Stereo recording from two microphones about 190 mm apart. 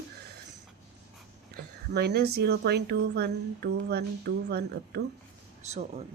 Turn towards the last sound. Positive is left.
turn(degrees=-35)  # may be behind; listen again after turning